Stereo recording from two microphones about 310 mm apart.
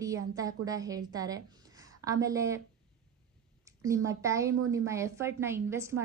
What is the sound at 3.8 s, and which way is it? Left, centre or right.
A woman's voice, centre.